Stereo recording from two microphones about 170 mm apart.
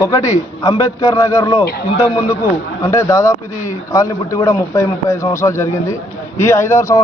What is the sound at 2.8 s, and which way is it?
A man's voice, 20° left (ahead or behind).